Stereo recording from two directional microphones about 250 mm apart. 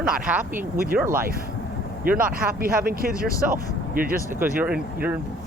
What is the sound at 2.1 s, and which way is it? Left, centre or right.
Speech, right.